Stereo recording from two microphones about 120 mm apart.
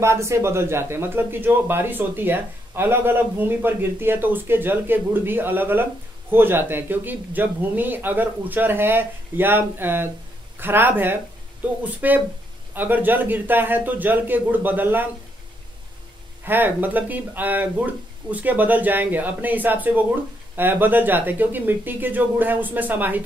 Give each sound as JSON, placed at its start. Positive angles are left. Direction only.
{"t": 0.0, "sound": "a man's voice", "side_deg": -25}
{"t": 16.4, "sound": "a man's voice", "side_deg": -15}